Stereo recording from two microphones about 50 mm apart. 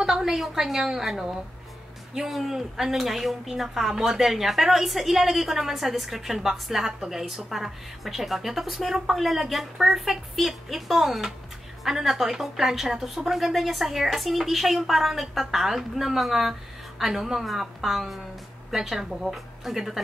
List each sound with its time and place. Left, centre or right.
0.0 s a woman's voice: centre